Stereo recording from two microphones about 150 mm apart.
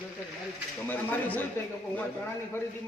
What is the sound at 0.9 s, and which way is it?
Speech, 10° left (ahead or behind).